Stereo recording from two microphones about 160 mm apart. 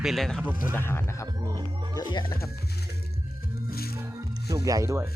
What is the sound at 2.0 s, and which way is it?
Speech, 30° left (ahead or behind).